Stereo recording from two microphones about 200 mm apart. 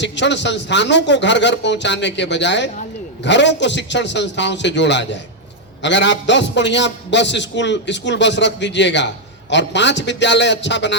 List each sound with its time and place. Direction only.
0.0 s a man's voice: 60° left (ahead or behind)